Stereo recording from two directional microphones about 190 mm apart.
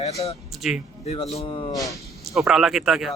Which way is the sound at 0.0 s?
35° left (ahead or behind).